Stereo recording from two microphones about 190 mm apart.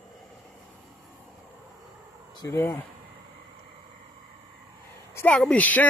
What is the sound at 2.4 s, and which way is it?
Speech, 15° left (ahead or behind).